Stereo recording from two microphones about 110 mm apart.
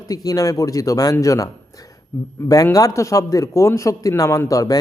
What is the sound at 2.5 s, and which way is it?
A man's voice, 35° left (ahead or behind).